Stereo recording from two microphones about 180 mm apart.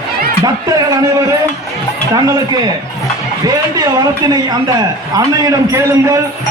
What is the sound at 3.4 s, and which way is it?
A man's voice, 20° right (ahead or behind).